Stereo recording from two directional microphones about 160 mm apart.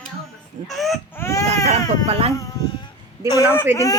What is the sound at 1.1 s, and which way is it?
Baby cry, 15° left (ahead or behind).